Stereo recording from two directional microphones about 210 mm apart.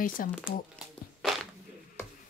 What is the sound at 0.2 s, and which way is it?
Speech, 40° left (ahead or behind).